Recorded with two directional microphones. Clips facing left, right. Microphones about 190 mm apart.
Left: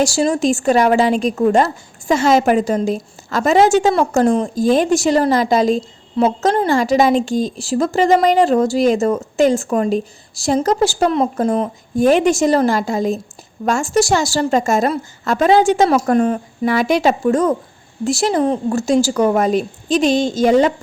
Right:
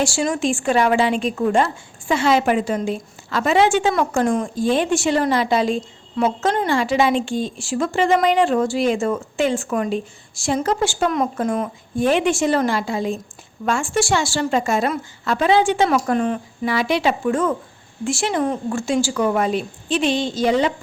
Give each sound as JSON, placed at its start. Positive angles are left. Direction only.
{"t": 0.0, "sound": "a woman's voice", "side_deg": 35}